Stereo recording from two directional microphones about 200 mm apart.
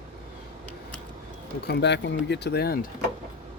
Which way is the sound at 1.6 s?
55° left (ahead or behind).